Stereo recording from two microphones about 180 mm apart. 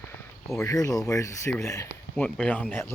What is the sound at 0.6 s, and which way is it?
Speech, 20° left (ahead or behind).